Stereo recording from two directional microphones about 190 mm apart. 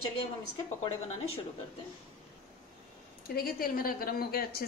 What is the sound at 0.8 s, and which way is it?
Speech, 30° left (ahead or behind).